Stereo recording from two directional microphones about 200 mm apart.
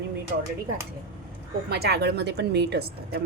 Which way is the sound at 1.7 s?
55° right (ahead or behind).